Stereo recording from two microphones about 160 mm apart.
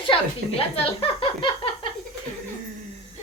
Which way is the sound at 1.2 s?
35° left (ahead or behind).